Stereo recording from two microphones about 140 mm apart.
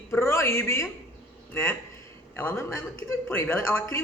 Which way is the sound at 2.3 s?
15° left (ahead or behind).